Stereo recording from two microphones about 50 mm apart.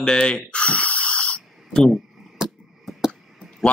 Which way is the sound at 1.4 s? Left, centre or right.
Centre.